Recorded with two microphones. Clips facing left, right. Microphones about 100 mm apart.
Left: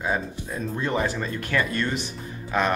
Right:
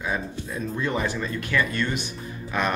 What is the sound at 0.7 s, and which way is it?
Speech, 30° left (ahead or behind).